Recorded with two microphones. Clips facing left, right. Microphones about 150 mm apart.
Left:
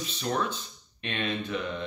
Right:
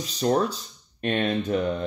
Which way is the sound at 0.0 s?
40° right (ahead or behind).